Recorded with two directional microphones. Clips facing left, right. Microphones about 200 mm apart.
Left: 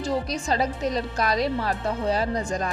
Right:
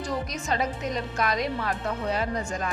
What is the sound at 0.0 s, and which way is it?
A woman's voice, 30° left (ahead or behind).